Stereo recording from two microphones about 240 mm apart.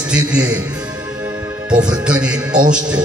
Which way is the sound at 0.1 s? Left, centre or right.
Centre.